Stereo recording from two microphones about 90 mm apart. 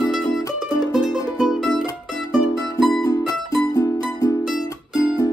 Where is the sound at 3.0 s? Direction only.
40° left (ahead or behind).